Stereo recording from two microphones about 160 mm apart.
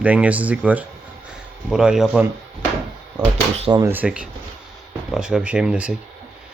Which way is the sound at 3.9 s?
10° right (ahead or behind).